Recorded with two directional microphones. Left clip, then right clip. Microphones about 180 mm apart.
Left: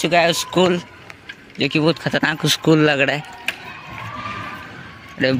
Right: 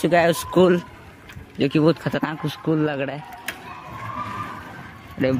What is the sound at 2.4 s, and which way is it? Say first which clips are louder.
Speech: left 10 dB; 20° left (ahead or behind).